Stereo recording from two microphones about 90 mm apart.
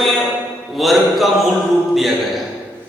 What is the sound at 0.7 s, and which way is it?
Mantra, centre (ahead or behind).